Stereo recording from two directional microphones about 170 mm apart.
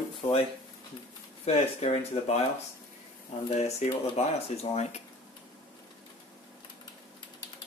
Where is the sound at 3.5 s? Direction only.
40° left (ahead or behind).